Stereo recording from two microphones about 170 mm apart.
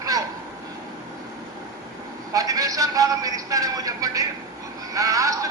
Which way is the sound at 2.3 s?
20° right (ahead or behind).